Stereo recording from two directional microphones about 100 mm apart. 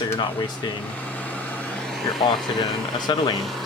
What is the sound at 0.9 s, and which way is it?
Vehicle, 15° left (ahead or behind).